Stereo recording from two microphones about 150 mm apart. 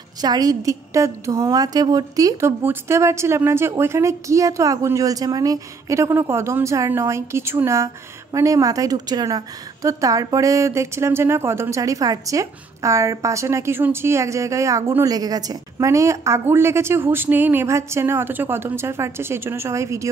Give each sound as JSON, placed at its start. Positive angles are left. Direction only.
{"t": 0.2, "sound": "a woman's voice", "side_deg": -25}